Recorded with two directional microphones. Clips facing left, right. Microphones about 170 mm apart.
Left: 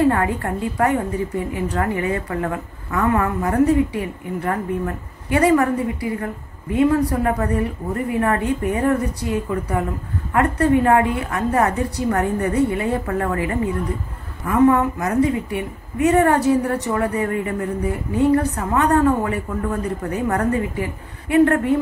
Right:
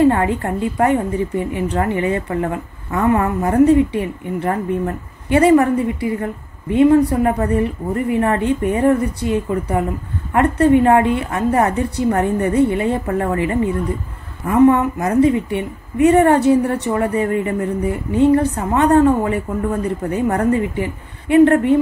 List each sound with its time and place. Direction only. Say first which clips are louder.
0.1 s a woman's voice: right 3 dB; 25° right (ahead or behind)